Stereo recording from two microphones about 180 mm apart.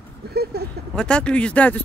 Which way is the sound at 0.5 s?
65° right (ahead or behind).